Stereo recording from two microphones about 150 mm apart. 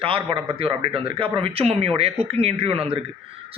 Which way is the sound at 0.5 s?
35° right (ahead or behind).